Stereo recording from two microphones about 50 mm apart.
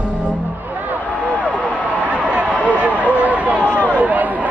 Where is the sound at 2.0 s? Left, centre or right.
Right.